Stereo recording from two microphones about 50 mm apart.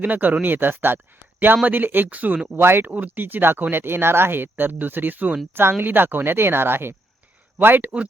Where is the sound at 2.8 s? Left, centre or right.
Right.